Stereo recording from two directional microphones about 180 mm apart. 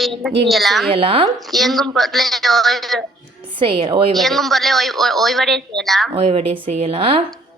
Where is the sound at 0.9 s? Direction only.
30° right (ahead or behind).